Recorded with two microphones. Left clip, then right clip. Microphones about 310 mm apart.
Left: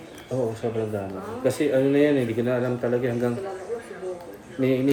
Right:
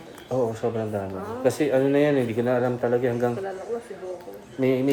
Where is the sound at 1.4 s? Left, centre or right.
Right.